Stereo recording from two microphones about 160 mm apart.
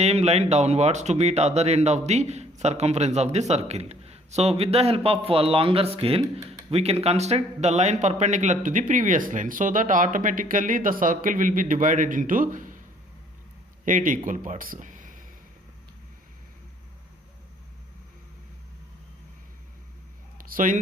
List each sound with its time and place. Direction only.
0.0 s speech: 40° right (ahead or behind)
13.8 s speech: 55° right (ahead or behind)
20.4 s a sound: 55° right (ahead or behind)